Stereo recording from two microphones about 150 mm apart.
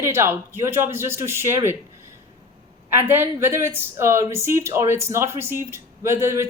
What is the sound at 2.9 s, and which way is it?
A woman's voice, 15° right (ahead or behind).